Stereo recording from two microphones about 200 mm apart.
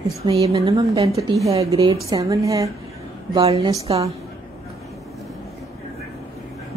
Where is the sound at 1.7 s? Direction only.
30° right (ahead or behind).